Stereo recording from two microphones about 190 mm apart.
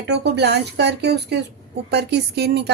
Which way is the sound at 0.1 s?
65° right (ahead or behind).